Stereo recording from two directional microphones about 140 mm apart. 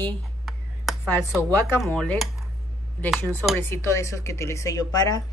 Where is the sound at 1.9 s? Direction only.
10° left (ahead or behind).